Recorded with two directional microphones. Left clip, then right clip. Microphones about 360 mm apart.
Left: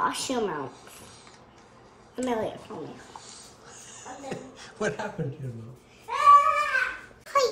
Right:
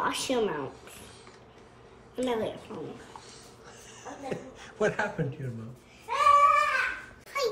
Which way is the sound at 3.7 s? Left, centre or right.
Centre.